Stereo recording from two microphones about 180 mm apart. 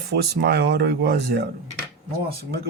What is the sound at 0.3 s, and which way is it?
Speech, 60° right (ahead or behind).